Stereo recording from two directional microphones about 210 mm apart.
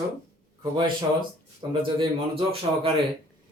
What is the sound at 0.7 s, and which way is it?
Speech, 20° right (ahead or behind).